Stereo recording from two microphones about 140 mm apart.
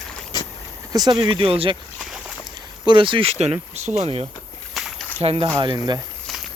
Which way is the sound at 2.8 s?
35° right (ahead or behind).